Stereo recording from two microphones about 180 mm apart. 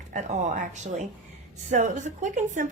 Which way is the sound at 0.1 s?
40° right (ahead or behind).